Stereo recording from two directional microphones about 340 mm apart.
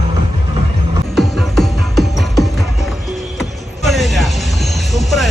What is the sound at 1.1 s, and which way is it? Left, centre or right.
Music, centre.